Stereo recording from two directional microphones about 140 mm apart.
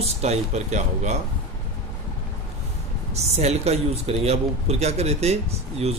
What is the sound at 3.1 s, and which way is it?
Speech, 50° right (ahead or behind).